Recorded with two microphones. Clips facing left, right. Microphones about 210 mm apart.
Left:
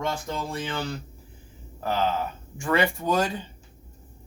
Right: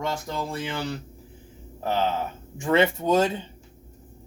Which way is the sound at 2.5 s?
20° right (ahead or behind).